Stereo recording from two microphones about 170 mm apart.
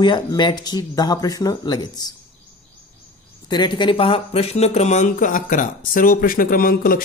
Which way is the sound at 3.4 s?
25° left (ahead or behind).